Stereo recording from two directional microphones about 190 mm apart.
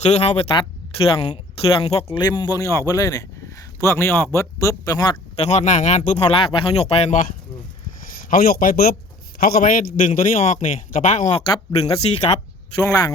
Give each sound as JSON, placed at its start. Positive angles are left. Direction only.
{"t": 0.0, "sound": "a man's voice", "side_deg": 35}
{"t": 2.0, "sound": "speech", "side_deg": 20}
{"t": 5.4, "sound": "a man's voice", "side_deg": 40}
{"t": 8.1, "sound": "a man's voice", "side_deg": 45}
{"t": 12.8, "sound": "speech", "side_deg": 15}